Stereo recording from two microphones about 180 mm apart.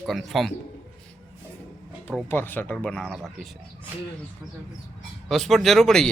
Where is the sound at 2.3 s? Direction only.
10° left (ahead or behind).